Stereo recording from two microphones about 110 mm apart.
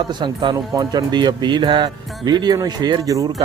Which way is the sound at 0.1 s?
40° right (ahead or behind).